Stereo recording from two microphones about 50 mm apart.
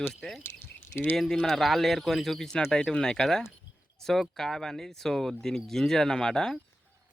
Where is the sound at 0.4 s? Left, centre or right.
Left.